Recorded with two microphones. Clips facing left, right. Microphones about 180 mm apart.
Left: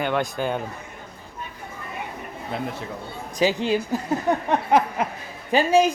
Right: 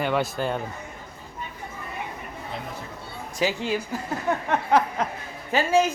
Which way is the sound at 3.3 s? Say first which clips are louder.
Left 4 dB; 20° left (ahead or behind).